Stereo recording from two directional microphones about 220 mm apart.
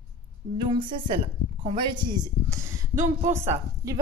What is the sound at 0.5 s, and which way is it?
A woman's voice, 20° right (ahead or behind).